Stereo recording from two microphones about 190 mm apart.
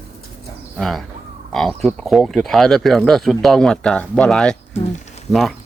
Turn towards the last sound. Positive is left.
turn(degrees=0)  # may be behind; listen again after turning